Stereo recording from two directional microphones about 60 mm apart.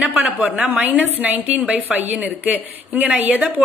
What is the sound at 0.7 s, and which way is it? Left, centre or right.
Speech, right.